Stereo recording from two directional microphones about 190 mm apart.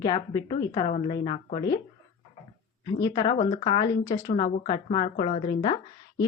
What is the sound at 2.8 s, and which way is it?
Speech, 20° left (ahead or behind).